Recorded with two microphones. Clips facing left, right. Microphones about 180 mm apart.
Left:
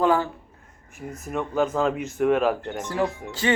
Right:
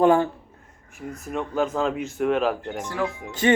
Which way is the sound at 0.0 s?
25° right (ahead or behind).